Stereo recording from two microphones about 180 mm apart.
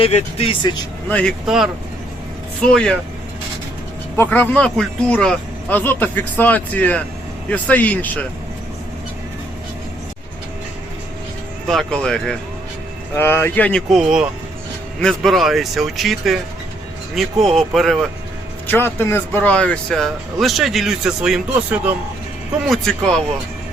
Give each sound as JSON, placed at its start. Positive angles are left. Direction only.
{"t": 0.0, "sound": "speech", "side_deg": 35}
{"t": 1.1, "sound": "speech", "side_deg": 0}
{"t": 4.2, "sound": "speech", "side_deg": 10}
{"t": 11.7, "sound": "speech", "side_deg": 5}
{"t": 17.4, "sound": "speech", "side_deg": 0}
{"t": 18.7, "sound": "speech", "side_deg": 10}